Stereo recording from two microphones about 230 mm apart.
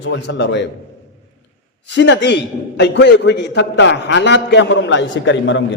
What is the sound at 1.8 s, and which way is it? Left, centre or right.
A man's voice, left.